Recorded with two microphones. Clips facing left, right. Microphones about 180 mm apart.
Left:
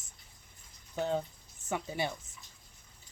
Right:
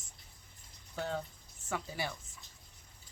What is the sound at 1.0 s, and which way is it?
Speech, 20° left (ahead or behind).